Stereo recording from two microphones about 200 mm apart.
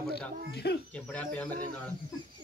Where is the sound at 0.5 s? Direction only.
55° left (ahead or behind).